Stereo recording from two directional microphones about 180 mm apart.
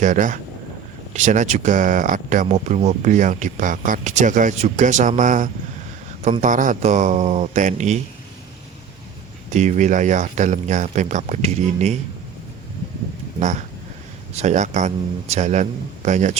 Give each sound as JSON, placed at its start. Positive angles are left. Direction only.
{"t": 0.0, "sound": "speech", "side_deg": -45}
{"t": 9.5, "sound": "speech", "side_deg": -40}
{"t": 13.4, "sound": "speech", "side_deg": -40}